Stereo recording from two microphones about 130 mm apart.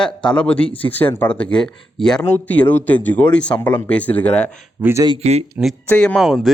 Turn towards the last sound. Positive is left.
turn(degrees=0)  # may be behind; listen again after turning